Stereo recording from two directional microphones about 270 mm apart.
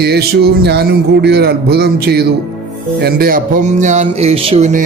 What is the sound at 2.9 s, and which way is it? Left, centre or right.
Music, right.